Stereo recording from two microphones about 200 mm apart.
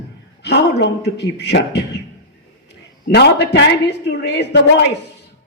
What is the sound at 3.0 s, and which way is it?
A woman's voice, 55° left (ahead or behind).